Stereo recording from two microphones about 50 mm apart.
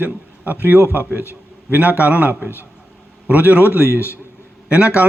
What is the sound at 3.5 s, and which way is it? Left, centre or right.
Speech, left.